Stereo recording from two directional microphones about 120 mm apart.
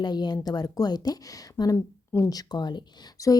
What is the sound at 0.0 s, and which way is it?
A woman's voice, 35° left (ahead or behind).